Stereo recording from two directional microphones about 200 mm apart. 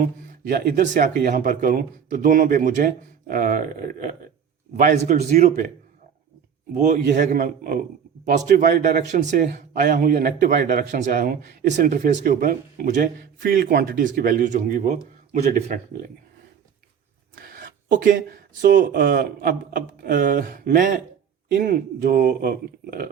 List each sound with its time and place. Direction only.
0.0 s a man's voice: 45° right (ahead or behind)
6.7 s a man's voice: 40° right (ahead or behind)
17.3 s speech: 45° right (ahead or behind)